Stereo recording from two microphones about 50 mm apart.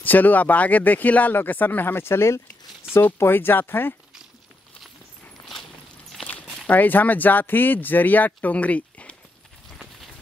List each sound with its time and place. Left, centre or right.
0.0 s speech: left
2.9 s speech: left
5.4 s a sound: centre
6.7 s speech: left